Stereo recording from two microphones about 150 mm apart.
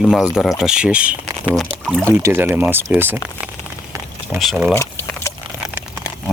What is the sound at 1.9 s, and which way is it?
Speech, 5° left (ahead or behind).